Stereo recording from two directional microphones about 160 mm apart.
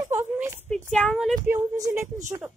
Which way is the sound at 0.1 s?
15° right (ahead or behind).